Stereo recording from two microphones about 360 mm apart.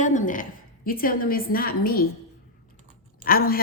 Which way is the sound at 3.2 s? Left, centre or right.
Left.